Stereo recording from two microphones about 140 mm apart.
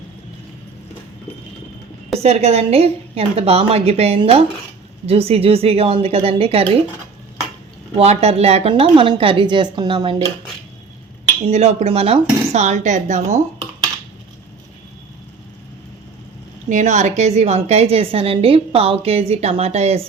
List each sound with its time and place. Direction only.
2.1 s a woman's voice: 50° right (ahead or behind)
7.9 s a woman's voice: 50° right (ahead or behind)
11.4 s a woman's voice: 50° right (ahead or behind)
16.6 s a woman's voice: 60° right (ahead or behind)